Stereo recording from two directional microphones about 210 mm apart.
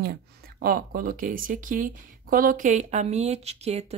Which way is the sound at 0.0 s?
45° right (ahead or behind).